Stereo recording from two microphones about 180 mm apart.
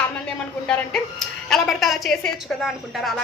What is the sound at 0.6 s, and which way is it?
A woman's voice, 5° left (ahead or behind).